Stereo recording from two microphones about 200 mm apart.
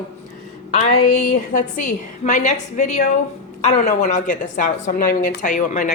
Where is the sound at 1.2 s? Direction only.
45° left (ahead or behind).